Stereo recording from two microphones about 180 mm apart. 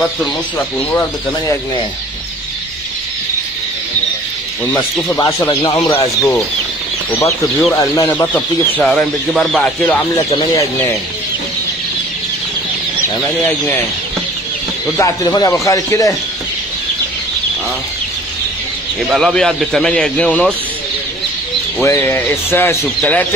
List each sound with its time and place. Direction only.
4.7 s speech: 15° left (ahead or behind)
7.1 s speech: 10° left (ahead or behind)
8.3 s speech: 5° left (ahead or behind)
10.1 s speech: 25° left (ahead or behind)
15.0 s speech: 20° left (ahead or behind)
19.0 s speech: centre (ahead or behind)
21.7 s speech: 15° left (ahead or behind)